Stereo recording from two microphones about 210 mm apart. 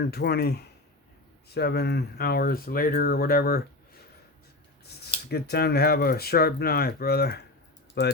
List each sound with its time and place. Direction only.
0.0 s speech: 50° left (ahead or behind)
4.9 s a sound: 50° left (ahead or behind)
5.3 s speech: 50° left (ahead or behind)